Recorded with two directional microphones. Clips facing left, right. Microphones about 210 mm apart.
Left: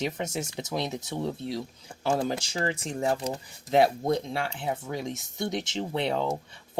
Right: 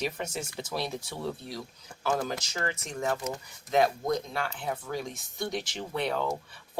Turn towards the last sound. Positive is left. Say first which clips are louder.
# left 2 dB
turn(degrees=25)  # may be behind; listen again after turning